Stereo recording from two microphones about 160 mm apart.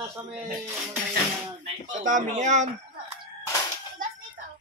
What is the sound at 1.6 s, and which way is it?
Speech, 50° right (ahead or behind).